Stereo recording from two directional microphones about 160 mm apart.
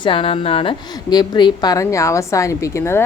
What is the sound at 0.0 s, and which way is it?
A woman's voice, 35° left (ahead or behind).